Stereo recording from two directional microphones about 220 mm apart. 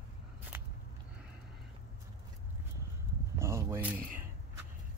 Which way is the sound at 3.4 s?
10° right (ahead or behind).